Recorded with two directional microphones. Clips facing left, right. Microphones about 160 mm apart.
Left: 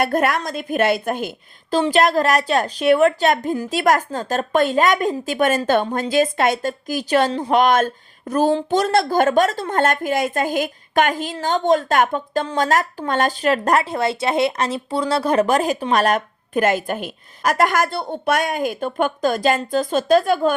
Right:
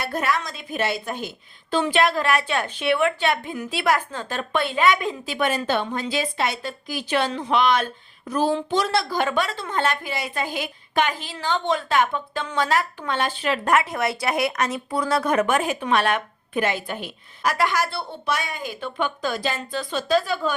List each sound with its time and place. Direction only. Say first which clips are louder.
0.0 s a woman's voice: left 6 dB; 50° left (ahead or behind)
1.7 s a woman's voice: left 4 dB; 40° left (ahead or behind)